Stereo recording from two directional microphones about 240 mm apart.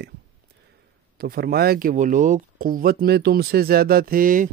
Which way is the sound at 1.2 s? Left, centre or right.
Right.